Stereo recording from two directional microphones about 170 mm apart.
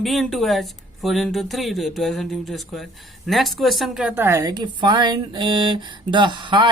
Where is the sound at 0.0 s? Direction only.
Centre (ahead or behind).